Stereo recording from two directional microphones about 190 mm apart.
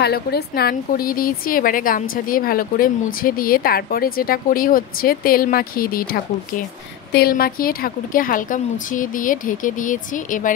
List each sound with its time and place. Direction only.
0.0 s a woman's voice: 55° left (ahead or behind)